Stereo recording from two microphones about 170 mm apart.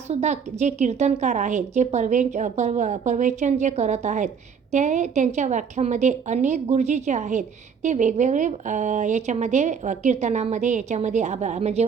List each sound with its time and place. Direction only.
0.1 s a woman's voice: 40° right (ahead or behind)